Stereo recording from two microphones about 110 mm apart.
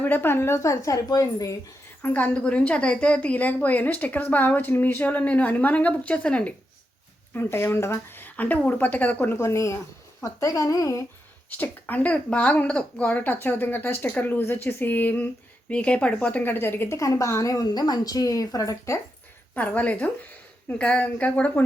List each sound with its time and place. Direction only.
0.0 s speech: 20° left (ahead or behind); by 1.5 s 35° left (ahead or behind)
2.0 s a woman's voice: 15° left (ahead or behind)
7.3 s a woman's voice: 20° left (ahead or behind)
11.4 s a woman's voice: 15° left (ahead or behind)
19.5 s a woman's voice: 15° left (ahead or behind)